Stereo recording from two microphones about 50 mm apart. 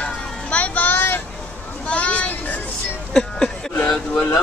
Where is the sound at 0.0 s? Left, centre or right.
Left.